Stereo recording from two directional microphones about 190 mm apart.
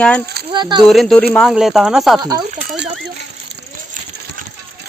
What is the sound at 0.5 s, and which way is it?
Speech, 25° right (ahead or behind).